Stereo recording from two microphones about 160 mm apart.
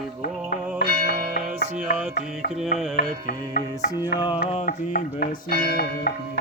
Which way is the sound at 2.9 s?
65° left (ahead or behind).